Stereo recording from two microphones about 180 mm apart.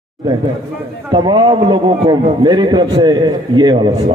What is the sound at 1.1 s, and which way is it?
A man's voice, 25° right (ahead or behind).